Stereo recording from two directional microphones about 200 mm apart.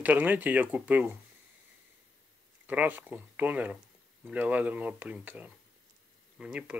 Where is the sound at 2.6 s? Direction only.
10° right (ahead or behind).